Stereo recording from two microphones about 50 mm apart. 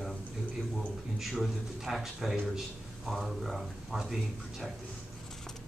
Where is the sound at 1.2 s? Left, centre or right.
Centre.